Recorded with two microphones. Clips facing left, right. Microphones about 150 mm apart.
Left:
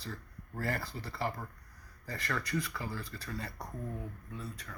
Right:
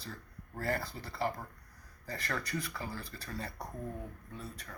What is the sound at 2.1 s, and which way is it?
Speech, 25° right (ahead or behind).